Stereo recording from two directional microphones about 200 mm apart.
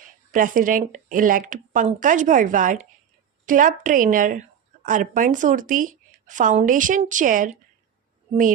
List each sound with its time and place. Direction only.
0.0 s a woman's voice: 40° right (ahead or behind)